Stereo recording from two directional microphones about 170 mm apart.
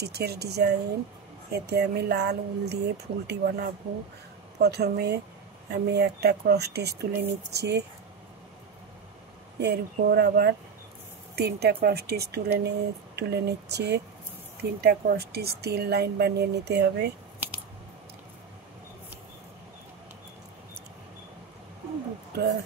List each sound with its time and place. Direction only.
0.0 s speech: 70° right (ahead or behind)
9.6 s speech: 75° right (ahead or behind)
17.4 s scissors: 10° right (ahead or behind)